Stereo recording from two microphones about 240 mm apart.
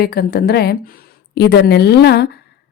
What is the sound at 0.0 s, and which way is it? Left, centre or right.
A woman's voice, left.